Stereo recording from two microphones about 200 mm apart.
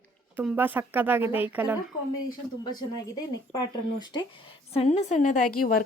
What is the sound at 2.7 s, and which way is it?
Speech, 20° left (ahead or behind).